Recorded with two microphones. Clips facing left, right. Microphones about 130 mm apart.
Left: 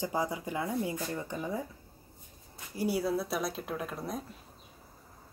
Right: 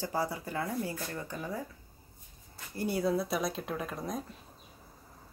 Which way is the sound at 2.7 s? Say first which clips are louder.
Even; 5° left (ahead or behind).